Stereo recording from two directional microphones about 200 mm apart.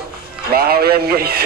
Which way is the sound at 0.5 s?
50° right (ahead or behind).